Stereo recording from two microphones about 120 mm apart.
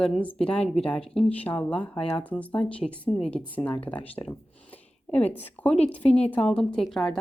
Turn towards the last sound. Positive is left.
turn(degrees=5)  # may be behind; listen again after turning